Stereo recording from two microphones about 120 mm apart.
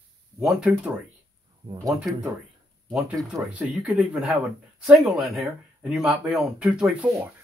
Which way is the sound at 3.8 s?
5° right (ahead or behind).